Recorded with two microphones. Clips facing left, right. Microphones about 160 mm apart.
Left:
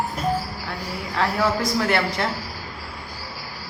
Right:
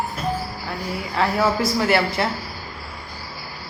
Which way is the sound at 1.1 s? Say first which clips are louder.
Right 2 dB; 5° right (ahead or behind).